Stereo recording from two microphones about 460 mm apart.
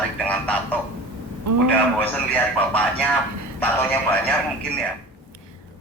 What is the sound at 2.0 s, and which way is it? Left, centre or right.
A man's voice, centre.